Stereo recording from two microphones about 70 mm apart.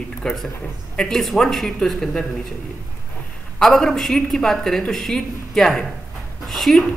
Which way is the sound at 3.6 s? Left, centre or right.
Centre.